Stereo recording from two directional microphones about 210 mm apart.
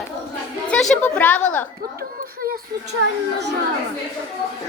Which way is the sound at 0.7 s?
5° left (ahead or behind).